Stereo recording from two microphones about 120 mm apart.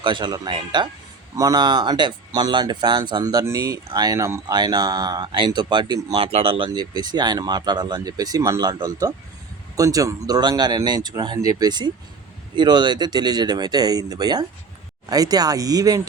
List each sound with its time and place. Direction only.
0.0 s speech: 40° right (ahead or behind)
6.2 s speech: 50° right (ahead or behind)
6.7 s speech: 35° right (ahead or behind)